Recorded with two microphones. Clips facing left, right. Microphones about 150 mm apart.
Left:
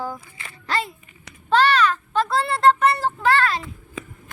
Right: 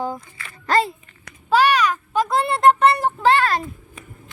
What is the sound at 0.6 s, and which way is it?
Speech, 45° right (ahead or behind).